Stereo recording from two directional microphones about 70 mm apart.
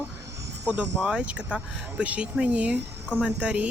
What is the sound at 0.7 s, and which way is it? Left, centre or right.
Speech, centre.